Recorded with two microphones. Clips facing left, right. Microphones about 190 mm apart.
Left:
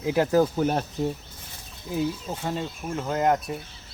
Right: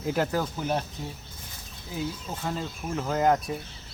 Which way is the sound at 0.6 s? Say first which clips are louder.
Left 4 dB; 45° left (ahead or behind).